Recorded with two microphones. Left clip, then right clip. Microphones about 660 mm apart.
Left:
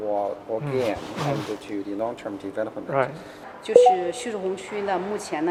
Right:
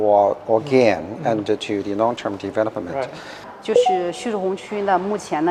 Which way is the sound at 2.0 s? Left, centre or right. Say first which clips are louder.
Right 10 dB; right.